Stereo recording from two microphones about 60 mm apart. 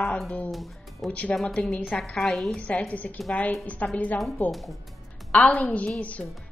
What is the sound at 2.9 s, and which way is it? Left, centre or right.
Speech, left.